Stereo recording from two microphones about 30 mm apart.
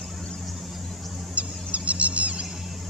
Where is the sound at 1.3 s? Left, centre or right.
Right.